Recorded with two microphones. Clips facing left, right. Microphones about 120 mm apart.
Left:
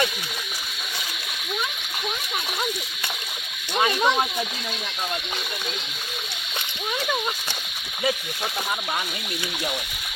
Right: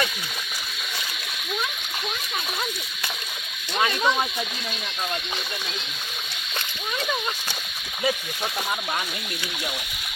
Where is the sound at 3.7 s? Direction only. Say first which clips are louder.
Left 2 dB; 15° left (ahead or behind).